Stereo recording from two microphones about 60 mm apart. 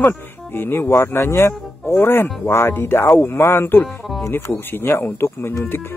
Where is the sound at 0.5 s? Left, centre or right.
Left.